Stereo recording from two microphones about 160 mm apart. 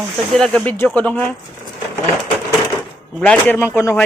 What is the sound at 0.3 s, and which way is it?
Speech, 5° left (ahead or behind).